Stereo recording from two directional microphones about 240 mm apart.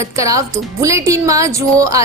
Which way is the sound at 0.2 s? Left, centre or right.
Centre.